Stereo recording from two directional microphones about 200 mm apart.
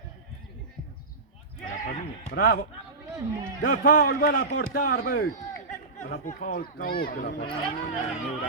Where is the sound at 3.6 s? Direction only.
45° left (ahead or behind).